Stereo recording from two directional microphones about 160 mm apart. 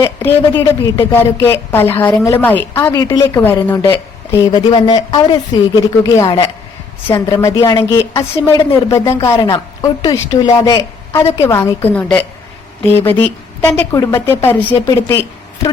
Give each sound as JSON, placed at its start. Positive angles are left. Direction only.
{"t": 0.0, "sound": "a woman's voice", "side_deg": 15}
{"t": 4.5, "sound": "a woman's voice", "side_deg": 30}